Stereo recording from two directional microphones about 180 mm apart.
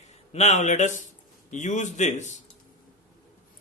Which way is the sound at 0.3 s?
40° left (ahead or behind).